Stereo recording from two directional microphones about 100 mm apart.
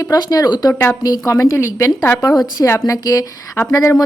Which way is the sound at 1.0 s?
35° left (ahead or behind).